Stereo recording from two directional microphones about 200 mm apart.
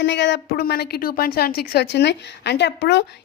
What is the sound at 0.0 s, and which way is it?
Speech, 60° left (ahead or behind).